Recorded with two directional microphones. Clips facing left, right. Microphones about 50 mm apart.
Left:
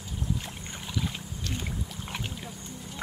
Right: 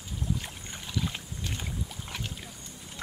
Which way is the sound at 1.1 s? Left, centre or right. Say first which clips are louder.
Left 2 dB; centre.